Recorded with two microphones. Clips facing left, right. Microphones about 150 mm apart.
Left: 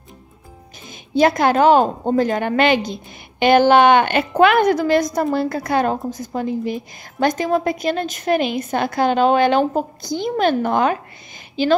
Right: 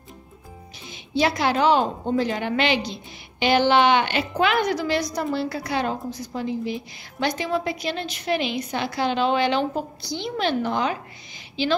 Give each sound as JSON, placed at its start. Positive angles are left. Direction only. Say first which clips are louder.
{"t": 0.8, "sound": "a woman's voice", "louder": "left 7 dB", "side_deg": 50}